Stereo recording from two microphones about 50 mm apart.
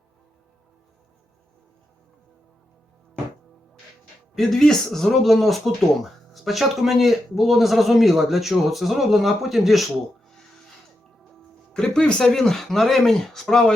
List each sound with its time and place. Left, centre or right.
4.4 s speech: centre
10.2 s music: centre
11.2 s speech: centre